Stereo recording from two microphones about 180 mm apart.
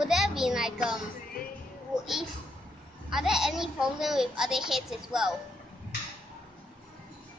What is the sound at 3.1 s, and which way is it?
A woman's voice, 5° right (ahead or behind).